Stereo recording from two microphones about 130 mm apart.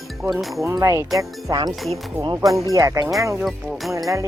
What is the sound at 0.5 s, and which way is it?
Speech, 25° right (ahead or behind).